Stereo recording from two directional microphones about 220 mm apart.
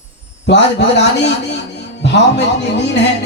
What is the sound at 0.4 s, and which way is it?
A man's voice, 50° left (ahead or behind).